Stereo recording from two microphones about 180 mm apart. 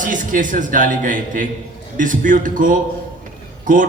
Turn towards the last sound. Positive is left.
turn(degrees=-50)  # may be behind; listen again after turning